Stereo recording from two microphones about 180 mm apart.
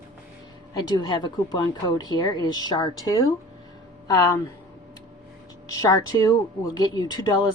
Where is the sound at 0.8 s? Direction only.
25° left (ahead or behind).